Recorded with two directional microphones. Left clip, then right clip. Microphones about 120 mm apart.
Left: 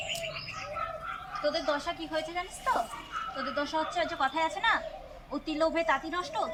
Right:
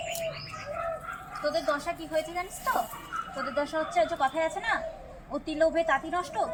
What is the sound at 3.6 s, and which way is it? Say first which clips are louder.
A woman's voice: right 4 dB; 15° left (ahead or behind).